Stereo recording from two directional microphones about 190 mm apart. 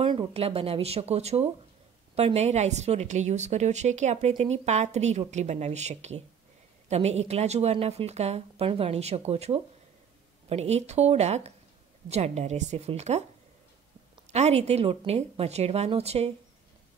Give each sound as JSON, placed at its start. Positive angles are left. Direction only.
{"t": 0.0, "sound": "a woman's voice", "side_deg": -25}
{"t": 14.2, "sound": "a woman's voice", "side_deg": -35}